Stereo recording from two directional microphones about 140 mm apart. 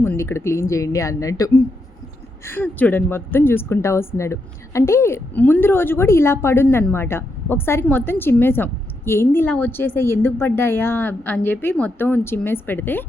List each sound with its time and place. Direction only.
0.0 s a woman's voice: 15° left (ahead or behind)